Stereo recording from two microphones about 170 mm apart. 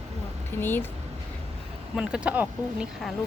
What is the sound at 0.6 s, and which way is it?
Speech, 10° left (ahead or behind).